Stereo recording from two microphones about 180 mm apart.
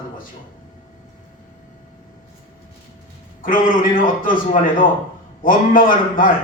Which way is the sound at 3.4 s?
50° left (ahead or behind).